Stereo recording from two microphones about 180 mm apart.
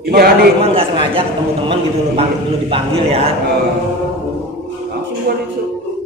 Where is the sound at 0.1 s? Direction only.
60° right (ahead or behind).